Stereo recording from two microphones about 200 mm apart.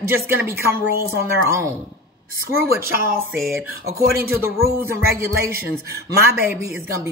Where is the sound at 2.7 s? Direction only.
10° right (ahead or behind).